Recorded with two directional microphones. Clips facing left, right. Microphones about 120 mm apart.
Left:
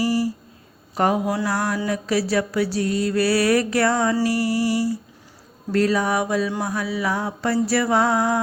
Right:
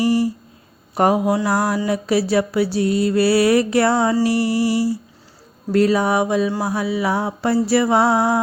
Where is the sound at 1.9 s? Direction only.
25° right (ahead or behind).